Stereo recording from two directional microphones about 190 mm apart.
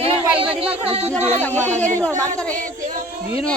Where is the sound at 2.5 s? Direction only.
45° right (ahead or behind).